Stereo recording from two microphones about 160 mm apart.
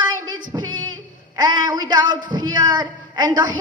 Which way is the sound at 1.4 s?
25° right (ahead or behind).